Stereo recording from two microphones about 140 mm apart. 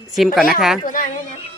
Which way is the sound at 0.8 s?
75° left (ahead or behind).